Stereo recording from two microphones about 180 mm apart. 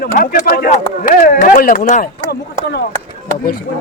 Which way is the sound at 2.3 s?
60° left (ahead or behind).